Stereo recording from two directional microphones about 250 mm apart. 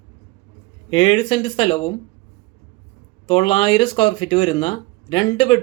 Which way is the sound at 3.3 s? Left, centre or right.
Left.